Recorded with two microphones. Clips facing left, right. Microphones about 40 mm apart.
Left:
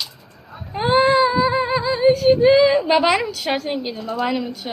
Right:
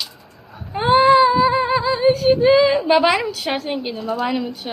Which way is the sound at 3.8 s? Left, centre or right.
Centre.